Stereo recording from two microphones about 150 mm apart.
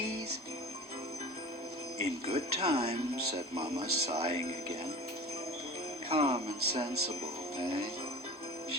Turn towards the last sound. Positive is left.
turn(degrees=-35)  # may be behind; listen again after turning